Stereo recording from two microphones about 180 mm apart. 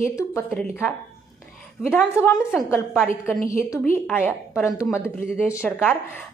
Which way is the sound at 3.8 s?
10° left (ahead or behind).